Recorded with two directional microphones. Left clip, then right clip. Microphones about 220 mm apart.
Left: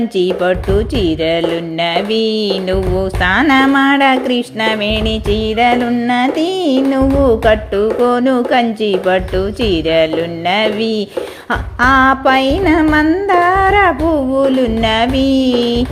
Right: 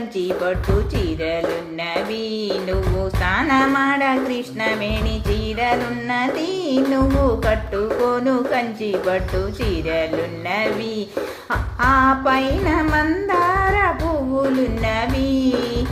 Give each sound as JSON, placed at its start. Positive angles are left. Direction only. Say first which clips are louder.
{"t": 1.2, "sound": "speech", "louder": "left 7 dB", "side_deg": 40}
{"t": 11.8, "sound": "speech", "louder": "left 6 dB", "side_deg": 35}